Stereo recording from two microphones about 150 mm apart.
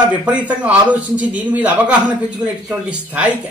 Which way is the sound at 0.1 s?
10° right (ahead or behind).